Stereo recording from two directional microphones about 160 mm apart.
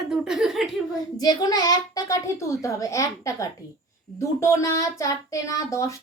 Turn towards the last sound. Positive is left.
turn(degrees=20)  # may be behind; listen again after turning